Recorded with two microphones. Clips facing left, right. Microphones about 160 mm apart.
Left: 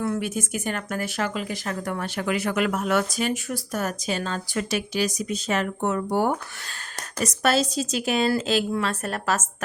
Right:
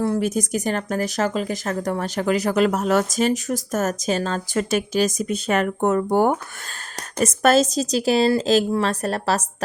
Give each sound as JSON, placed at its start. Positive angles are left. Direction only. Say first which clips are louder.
{"t": 0.0, "sound": "speech", "louder": "right 5 dB", "side_deg": -35}